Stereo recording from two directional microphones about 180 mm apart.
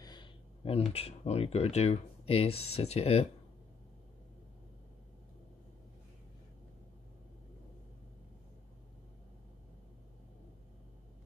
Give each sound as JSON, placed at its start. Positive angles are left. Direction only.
{"t": 0.0, "sound": "speech", "side_deg": 25}